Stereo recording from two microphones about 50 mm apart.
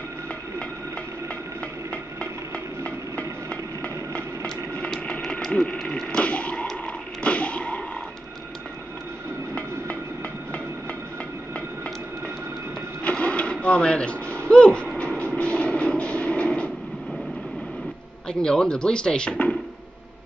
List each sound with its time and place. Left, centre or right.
2.8 s train: left
5.5 s speech: left
6.1 s a sound: left
13.0 s a sound: left
15.0 s vehicle: left
18.3 s speech: centre